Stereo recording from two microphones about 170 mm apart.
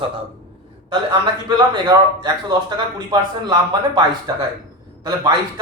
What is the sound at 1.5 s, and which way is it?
Speech, 25° right (ahead or behind).